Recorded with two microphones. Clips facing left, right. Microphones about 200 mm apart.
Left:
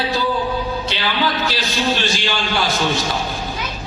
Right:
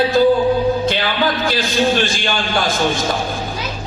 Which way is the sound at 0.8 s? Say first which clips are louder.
Right 4 dB; 50° right (ahead or behind).